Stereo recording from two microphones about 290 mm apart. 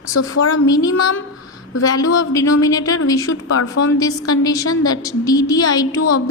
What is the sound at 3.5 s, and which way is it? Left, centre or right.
Speech, left.